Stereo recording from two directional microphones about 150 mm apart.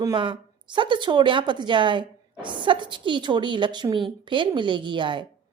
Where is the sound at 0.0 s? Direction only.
30° right (ahead or behind).